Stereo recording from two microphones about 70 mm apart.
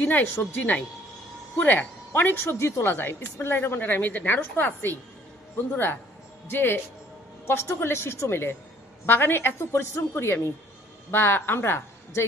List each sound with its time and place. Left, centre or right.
0.0 s a woman's voice: left
6.5 s a woman's voice: left